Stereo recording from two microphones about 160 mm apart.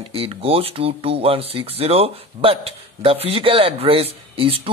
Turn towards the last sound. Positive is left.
turn(degrees=-35)  # may be behind; listen again after turning